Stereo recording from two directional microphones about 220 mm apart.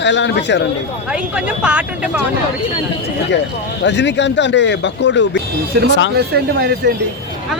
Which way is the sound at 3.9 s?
55° left (ahead or behind).